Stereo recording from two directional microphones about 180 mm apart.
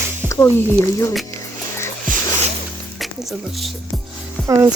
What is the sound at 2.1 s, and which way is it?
Music, 50° right (ahead or behind).